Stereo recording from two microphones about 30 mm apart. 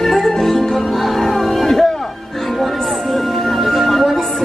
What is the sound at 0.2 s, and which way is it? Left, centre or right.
Music, centre.